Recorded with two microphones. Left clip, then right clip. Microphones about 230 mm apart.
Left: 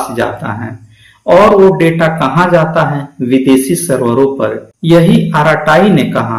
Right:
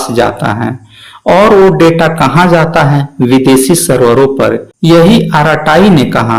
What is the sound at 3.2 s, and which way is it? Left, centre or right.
A woman's voice, right.